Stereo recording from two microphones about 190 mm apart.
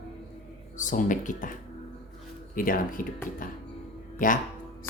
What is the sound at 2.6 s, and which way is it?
Speech, 45° left (ahead or behind).